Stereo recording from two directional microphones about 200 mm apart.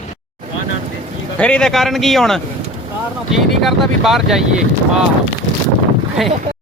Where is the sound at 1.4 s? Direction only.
5° left (ahead or behind).